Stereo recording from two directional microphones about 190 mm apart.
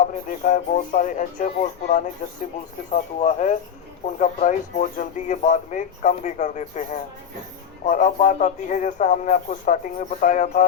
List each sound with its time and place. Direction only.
0.0 s speech: 40° left (ahead or behind)
7.9 s speech: 40° left (ahead or behind)